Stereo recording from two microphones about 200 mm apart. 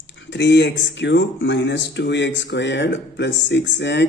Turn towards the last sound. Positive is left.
turn(degrees=60)  # may be behind; listen again after turning